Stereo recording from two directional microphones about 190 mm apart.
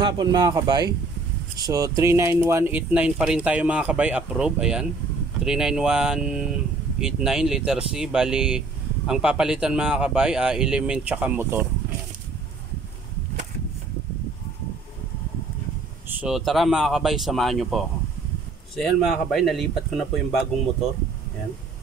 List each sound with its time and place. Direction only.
0.0 s speech: 20° right (ahead or behind)
16.2 s speech: centre (ahead or behind)